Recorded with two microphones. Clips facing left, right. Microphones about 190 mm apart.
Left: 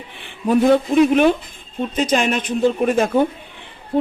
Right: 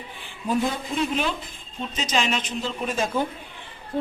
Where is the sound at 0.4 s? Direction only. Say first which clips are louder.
Left 11 dB; 65° left (ahead or behind).